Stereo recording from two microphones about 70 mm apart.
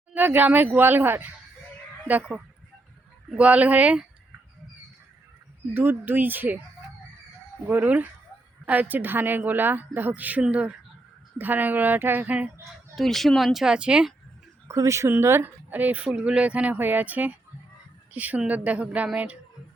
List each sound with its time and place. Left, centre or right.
0.1 s speech: right
5.7 s speech: right
7.7 s speech: right
13.0 s speech: centre
14.7 s speech: right
15.2 s speech: right